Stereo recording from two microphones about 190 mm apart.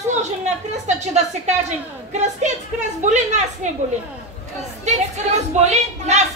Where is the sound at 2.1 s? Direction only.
40° right (ahead or behind).